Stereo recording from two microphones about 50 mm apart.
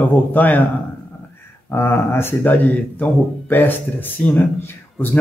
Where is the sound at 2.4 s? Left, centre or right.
Left.